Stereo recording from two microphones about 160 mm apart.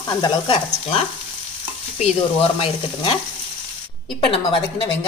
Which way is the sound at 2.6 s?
30° left (ahead or behind).